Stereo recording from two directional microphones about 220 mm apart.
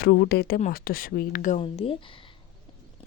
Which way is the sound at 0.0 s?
45° left (ahead or behind).